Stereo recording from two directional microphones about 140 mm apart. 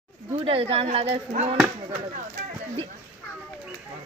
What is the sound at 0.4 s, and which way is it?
Speech, 45° right (ahead or behind).